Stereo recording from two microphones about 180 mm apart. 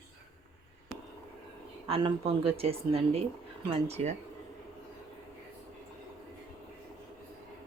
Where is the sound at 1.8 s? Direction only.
30° right (ahead or behind).